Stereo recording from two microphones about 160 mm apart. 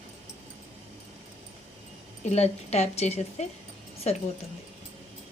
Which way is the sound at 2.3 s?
45° left (ahead or behind).